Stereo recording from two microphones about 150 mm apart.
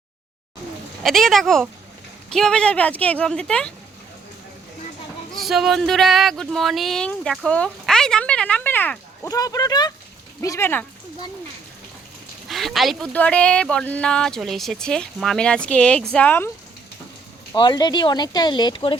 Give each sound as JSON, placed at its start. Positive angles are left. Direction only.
{"t": 1.0, "sound": "speech", "side_deg": 0}
{"t": 5.3, "sound": "speech", "side_deg": 0}
{"t": 9.3, "sound": "speech", "side_deg": 25}
{"t": 12.5, "sound": "speech", "side_deg": 0}
{"t": 17.5, "sound": "speech", "side_deg": 30}